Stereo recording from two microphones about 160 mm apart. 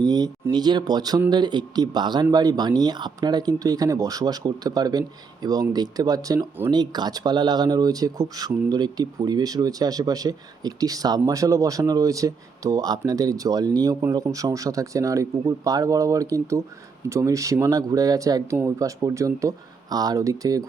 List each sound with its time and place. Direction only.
0.0 s speech: 25° right (ahead or behind)